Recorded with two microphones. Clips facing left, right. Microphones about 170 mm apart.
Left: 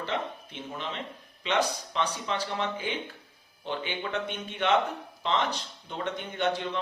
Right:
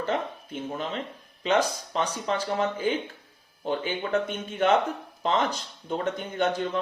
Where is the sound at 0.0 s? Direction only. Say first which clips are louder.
Right 4 dB; 45° right (ahead or behind).